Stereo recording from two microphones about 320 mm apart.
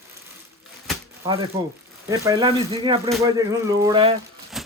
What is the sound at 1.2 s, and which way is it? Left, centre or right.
Speech, centre.